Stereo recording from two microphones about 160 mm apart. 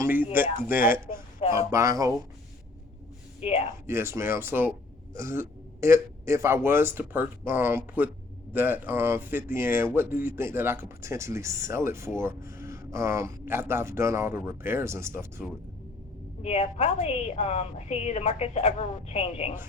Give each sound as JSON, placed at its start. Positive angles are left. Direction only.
{"t": 0.0, "sound": "speech", "side_deg": -10}
{"t": 3.4, "sound": "a woman's voice", "side_deg": 40}
{"t": 3.8, "sound": "speech", "side_deg": -15}
{"t": 16.4, "sound": "a woman's voice", "side_deg": 40}